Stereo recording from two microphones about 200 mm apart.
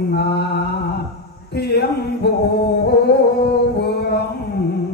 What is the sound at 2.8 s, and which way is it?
Music, 55° left (ahead or behind).